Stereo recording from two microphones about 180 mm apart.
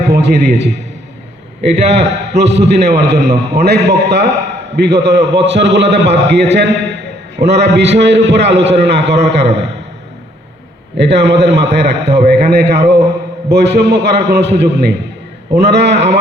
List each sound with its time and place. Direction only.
0.0 s a man's voice: 70° right (ahead or behind)
1.9 s a man's voice: 35° right (ahead or behind)
2.4 s a man's voice: 70° right (ahead or behind)
10.9 s a man's voice: 70° right (ahead or behind)